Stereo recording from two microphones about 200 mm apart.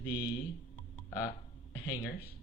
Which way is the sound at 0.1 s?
25° left (ahead or behind).